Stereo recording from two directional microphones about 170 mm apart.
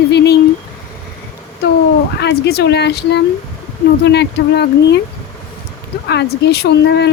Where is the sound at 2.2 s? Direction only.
80° left.